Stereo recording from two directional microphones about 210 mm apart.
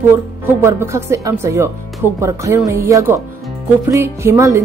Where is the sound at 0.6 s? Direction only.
10° right (ahead or behind).